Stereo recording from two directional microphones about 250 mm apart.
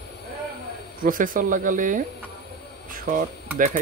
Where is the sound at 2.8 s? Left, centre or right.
Right.